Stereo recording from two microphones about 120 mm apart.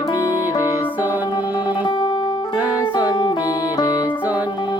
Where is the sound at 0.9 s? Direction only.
15° right (ahead or behind).